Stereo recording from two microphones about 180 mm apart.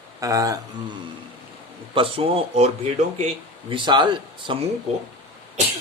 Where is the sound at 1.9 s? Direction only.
30° right (ahead or behind).